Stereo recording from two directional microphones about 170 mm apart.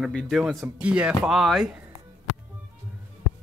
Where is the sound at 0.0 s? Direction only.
Centre (ahead or behind).